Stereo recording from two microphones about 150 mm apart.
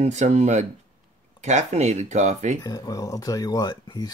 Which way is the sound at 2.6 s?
25° left (ahead or behind).